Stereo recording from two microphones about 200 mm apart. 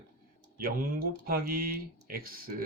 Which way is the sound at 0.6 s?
45° right (ahead or behind).